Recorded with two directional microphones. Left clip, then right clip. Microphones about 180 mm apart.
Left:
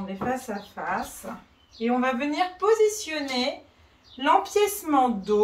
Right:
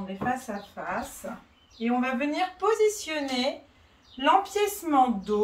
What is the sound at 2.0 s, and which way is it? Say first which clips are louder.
A woman's voice: left 2 dB; 5° right (ahead or behind).